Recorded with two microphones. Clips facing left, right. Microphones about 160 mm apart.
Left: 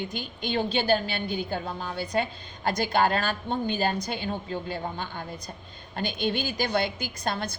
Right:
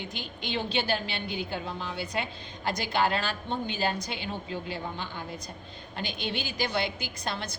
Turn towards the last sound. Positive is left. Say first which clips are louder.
# left 4 dB
turn(degrees=50)  # may be behind; listen again after turning